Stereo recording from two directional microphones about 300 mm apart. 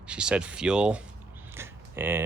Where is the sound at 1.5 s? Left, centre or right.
Centre.